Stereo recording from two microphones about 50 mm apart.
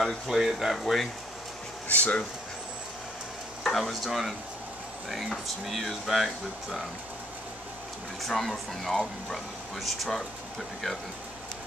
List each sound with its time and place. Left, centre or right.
0.0 s speech: centre
1.9 s speech: left
3.6 s speech: centre
5.7 s speech: centre
8.2 s speech: centre